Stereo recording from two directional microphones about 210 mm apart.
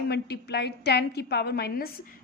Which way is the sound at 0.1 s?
50° left (ahead or behind).